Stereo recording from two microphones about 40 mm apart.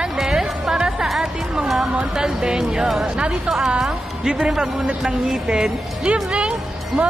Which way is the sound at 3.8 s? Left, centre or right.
Centre.